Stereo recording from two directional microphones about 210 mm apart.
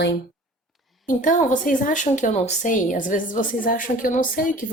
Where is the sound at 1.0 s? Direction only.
35° left (ahead or behind).